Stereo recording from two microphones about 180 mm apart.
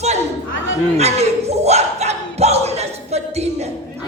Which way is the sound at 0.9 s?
35° right (ahead or behind).